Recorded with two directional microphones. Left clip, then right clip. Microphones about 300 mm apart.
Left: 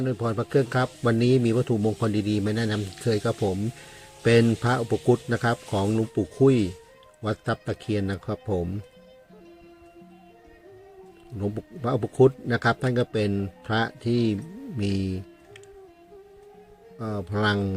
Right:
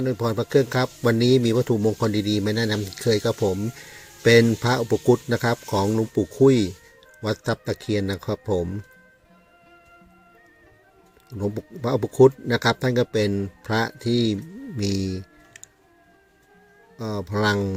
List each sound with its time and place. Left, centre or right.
0.0 s speech: centre
11.5 s speech: centre
14.9 s speech: right
17.0 s speech: centre